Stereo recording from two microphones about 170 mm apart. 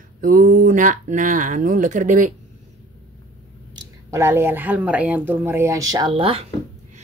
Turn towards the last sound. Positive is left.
turn(degrees=-35)  # may be behind; listen again after turning